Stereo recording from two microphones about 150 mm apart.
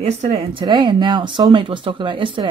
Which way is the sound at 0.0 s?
45° right (ahead or behind).